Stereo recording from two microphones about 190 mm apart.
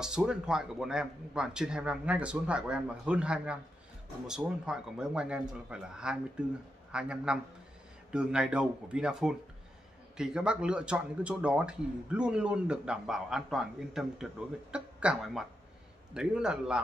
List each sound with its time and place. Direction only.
0.0 s speech: 5° right (ahead or behind)